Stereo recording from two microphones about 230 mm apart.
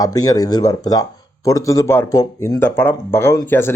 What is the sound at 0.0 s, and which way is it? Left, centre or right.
Speech, centre.